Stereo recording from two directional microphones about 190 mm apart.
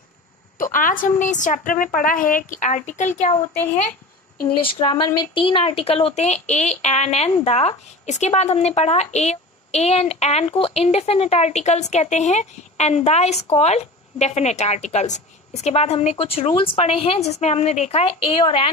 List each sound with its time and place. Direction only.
0.6 s a woman's voice: 45° left (ahead or behind)
4.6 s speech: 30° left (ahead or behind)